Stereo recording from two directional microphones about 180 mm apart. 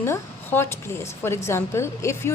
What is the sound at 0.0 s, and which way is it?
A woman's voice, 15° left (ahead or behind).